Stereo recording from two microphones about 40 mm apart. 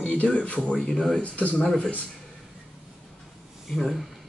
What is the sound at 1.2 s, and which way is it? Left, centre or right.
Speech, left.